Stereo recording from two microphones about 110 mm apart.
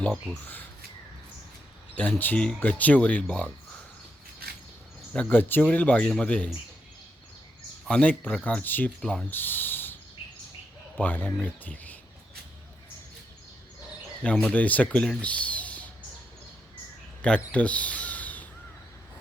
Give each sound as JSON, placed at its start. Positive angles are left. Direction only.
{"t": 2.0, "sound": "speech", "side_deg": 15}
{"t": 5.1, "sound": "speech", "side_deg": 15}
{"t": 7.9, "sound": "speech", "side_deg": 10}
{"t": 9.0, "sound": "speech", "side_deg": 5}
{"t": 9.3, "sound": "speech", "side_deg": 15}
{"t": 11.0, "sound": "speech", "side_deg": 15}
{"t": 14.3, "sound": "speech", "side_deg": 10}
{"t": 17.2, "sound": "speech", "side_deg": 10}